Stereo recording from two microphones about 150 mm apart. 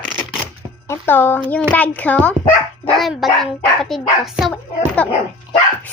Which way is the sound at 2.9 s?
Centre (ahead or behind).